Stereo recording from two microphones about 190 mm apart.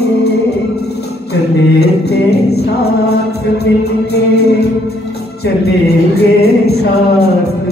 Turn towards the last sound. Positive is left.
turn(degrees=55)  # may be behind; listen again after turning